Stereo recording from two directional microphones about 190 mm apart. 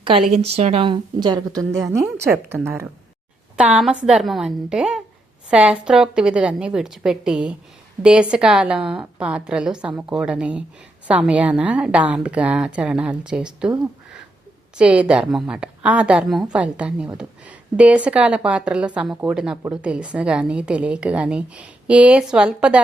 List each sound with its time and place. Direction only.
0.3 s a woman's voice: 35° right (ahead or behind); by 13.7 s 5° right (ahead or behind)
14.8 s a woman's voice: 5° right (ahead or behind)